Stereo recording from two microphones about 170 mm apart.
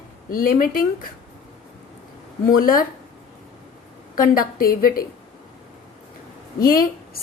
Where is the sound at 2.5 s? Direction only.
55° left (ahead or behind).